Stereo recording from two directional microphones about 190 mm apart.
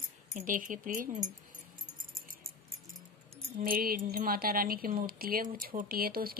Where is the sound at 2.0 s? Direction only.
45° right (ahead or behind).